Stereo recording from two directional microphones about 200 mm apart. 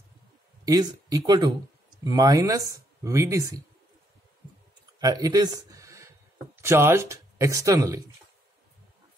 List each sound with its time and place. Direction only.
0.7 s speech: 20° right (ahead or behind)
5.0 s speech: 20° right (ahead or behind)